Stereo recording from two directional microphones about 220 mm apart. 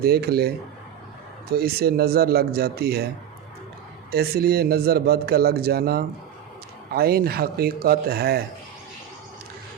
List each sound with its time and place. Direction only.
0.0 s a man's voice: 45° right (ahead or behind)
4.1 s a man's voice: 45° right (ahead or behind)